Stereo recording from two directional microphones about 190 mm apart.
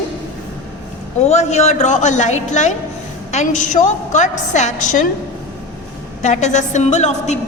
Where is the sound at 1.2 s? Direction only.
35° left (ahead or behind).